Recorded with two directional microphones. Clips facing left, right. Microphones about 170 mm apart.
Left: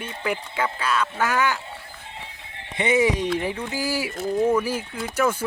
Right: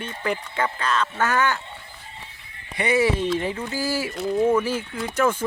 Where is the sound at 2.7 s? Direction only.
20° left (ahead or behind).